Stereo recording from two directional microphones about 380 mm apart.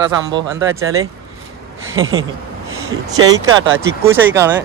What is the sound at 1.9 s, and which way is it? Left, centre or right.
Speech, right.